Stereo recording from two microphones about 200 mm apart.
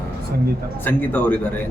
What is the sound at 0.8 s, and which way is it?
Speech, 10° left (ahead or behind).